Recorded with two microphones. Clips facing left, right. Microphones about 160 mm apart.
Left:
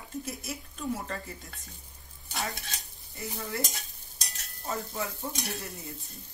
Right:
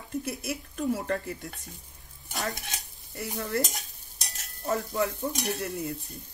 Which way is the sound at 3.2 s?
70° right (ahead or behind).